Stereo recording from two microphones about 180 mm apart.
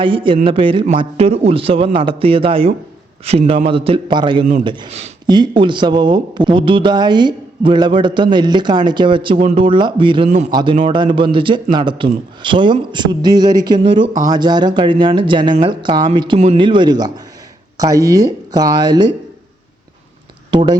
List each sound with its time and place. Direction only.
0.0 s a man's voice: 30° right (ahead or behind)
5.2 s speech: 25° right (ahead or behind)
10.2 s a man's voice: 40° right (ahead or behind)
10.5 s speech: 25° right (ahead or behind)
20.5 s speech: 25° right (ahead or behind)